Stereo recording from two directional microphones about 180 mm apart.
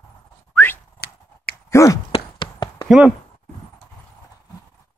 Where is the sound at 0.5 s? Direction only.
10° left (ahead or behind).